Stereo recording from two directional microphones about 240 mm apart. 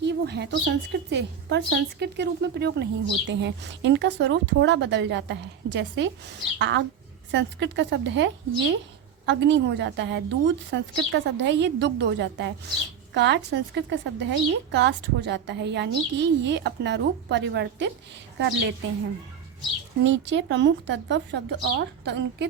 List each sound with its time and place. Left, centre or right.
0.0 s a woman's voice: right
20.1 s a woman's voice: right